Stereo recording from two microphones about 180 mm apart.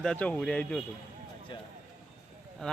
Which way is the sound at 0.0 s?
5° left (ahead or behind).